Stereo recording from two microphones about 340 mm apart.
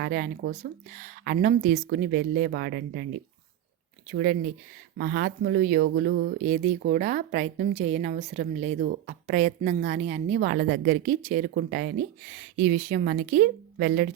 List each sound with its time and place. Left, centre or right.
0.0 s speech: right
4.1 s speech: right